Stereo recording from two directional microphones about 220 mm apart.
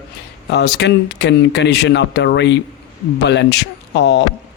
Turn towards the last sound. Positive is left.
turn(degrees=50)  # may be behind; listen again after turning